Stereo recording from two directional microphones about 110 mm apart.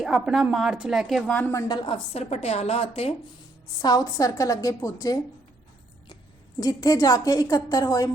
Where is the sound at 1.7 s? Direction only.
50° left (ahead or behind).